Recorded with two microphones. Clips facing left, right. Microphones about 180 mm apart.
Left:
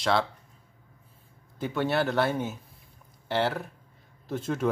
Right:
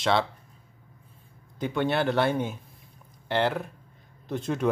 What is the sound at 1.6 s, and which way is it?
Speech, 5° left (ahead or behind).